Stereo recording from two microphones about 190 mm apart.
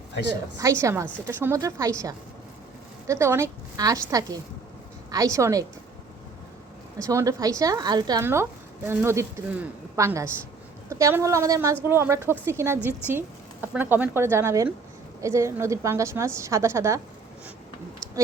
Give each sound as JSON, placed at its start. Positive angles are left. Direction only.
{"t": 0.6, "sound": "a woman's voice", "side_deg": -15}
{"t": 7.0, "sound": "a woman's voice", "side_deg": -15}